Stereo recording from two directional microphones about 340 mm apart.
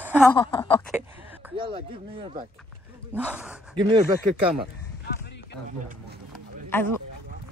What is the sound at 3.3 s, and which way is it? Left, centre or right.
Speech, centre.